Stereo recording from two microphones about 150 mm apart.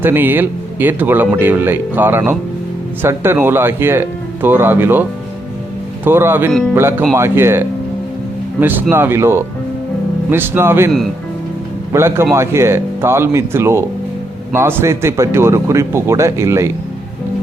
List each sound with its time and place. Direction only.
0.0 s speech: 15° right (ahead or behind)
6.1 s speech: 15° right (ahead or behind)
8.6 s a man's voice: 15° right (ahead or behind)